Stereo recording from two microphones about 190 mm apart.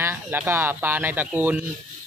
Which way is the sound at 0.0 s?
10° right (ahead or behind).